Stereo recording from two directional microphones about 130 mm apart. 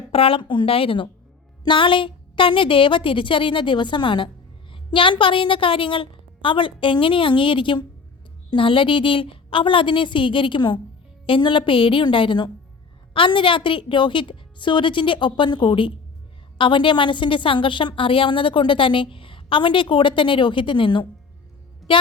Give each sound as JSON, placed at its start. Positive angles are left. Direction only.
{"t": 0.1, "sound": "a woman's voice", "side_deg": 45}
{"t": 21.9, "sound": "music", "side_deg": 40}